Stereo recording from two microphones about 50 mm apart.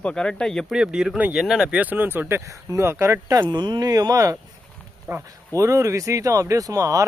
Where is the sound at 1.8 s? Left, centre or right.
Right.